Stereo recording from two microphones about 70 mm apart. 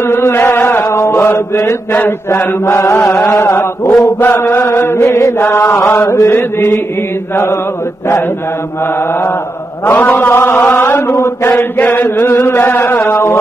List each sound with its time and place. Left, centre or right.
0.0 s chant: left
0.9 s mantra: left
1.9 s mantra: left
3.3 s mantra: left
3.5 s chant: left
4.2 s mantra: left
9.8 s mantra: left
11.1 s mantra: left
11.4 s chant: left
12.2 s mantra: left